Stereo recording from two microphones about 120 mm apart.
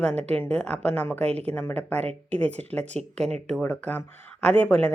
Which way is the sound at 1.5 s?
15° left (ahead or behind).